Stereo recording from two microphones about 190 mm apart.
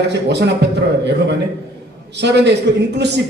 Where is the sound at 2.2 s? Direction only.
65° right (ahead or behind).